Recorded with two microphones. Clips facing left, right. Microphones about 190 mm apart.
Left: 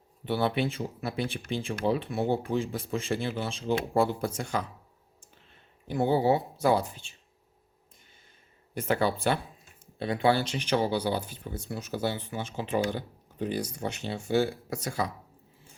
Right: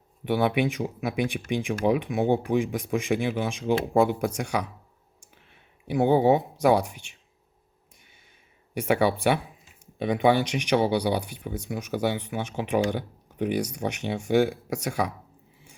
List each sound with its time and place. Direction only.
0.3 s speech: 15° right (ahead or behind)
6.1 s speech: 20° right (ahead or behind)
8.7 s speech: 15° right (ahead or behind)